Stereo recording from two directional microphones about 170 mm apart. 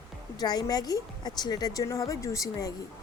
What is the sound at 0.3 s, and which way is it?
A woman's voice, 25° left (ahead or behind).